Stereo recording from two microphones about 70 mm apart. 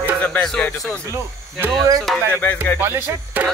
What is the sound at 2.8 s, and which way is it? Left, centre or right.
Music, right.